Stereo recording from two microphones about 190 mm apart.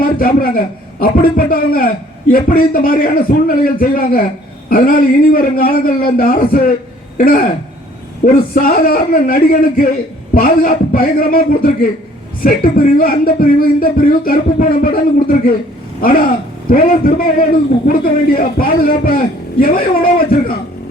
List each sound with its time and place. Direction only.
0.0 s a man's voice: 50° left (ahead or behind)